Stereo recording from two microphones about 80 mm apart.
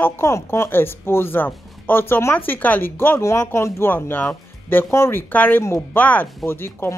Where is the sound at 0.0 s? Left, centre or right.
Left.